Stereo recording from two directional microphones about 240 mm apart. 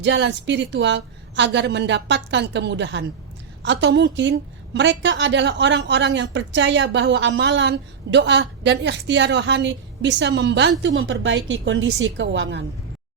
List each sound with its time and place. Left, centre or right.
0.0 s a woman's voice: right